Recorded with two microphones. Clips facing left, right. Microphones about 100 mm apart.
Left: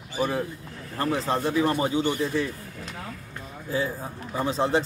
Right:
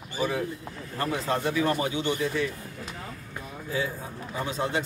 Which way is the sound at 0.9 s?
30° left (ahead or behind).